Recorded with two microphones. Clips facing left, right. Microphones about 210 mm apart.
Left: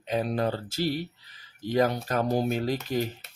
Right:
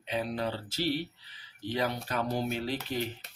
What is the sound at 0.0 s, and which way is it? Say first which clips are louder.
Speech: left 5 dB; 45° left (ahead or behind).